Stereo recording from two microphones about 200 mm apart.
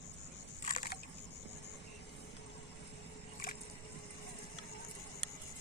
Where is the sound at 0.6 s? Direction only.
45° left (ahead or behind).